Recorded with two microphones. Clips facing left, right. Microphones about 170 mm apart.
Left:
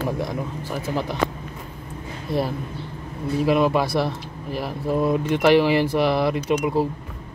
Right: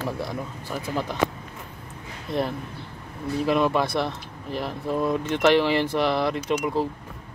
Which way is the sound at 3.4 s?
10° left (ahead or behind).